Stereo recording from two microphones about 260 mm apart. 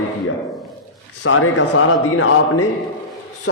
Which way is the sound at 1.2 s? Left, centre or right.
Left.